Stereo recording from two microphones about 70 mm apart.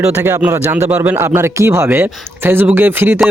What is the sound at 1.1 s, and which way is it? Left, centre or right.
Speech, right.